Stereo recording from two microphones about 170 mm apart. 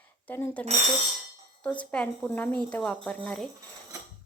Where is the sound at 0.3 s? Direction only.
10° left (ahead or behind).